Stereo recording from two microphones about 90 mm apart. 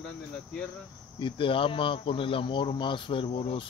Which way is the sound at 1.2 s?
75° left (ahead or behind).